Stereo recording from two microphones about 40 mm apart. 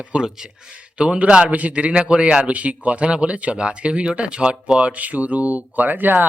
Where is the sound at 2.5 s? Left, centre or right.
Right.